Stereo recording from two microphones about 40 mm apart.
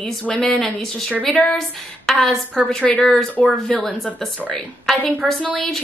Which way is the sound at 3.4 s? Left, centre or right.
Left.